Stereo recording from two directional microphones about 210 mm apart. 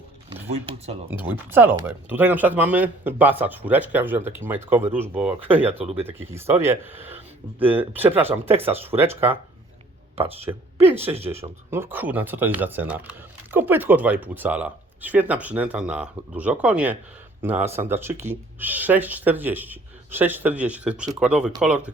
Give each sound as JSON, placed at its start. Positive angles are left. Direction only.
{"t": 1.2, "sound": "speech", "side_deg": -10}
{"t": 10.5, "sound": "speech", "side_deg": -15}
{"t": 11.7, "sound": "speech", "side_deg": -10}